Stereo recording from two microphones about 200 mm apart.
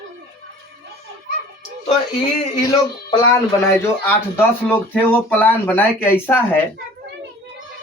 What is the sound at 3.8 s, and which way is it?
Speech, 10° left (ahead or behind).